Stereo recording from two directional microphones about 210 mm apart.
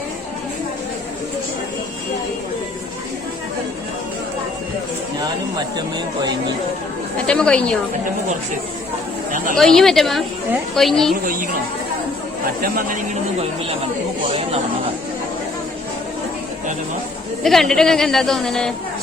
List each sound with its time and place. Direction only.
7.3 s a woman's voice: 5° left (ahead or behind)
9.6 s a woman's voice: centre (ahead or behind)
12.6 s speech: 45° right (ahead or behind)
17.4 s a woman's voice: centre (ahead or behind)